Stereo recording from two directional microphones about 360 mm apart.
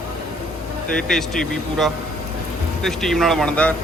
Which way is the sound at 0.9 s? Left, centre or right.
Centre.